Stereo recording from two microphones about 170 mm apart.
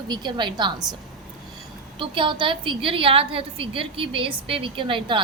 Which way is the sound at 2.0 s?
30° right (ahead or behind).